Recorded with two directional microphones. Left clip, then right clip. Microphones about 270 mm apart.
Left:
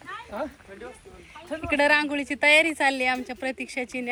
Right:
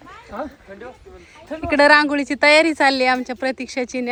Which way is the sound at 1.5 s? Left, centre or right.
Right.